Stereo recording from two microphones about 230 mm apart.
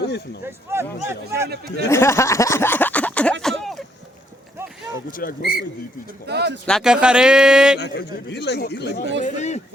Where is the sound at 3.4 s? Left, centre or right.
Centre.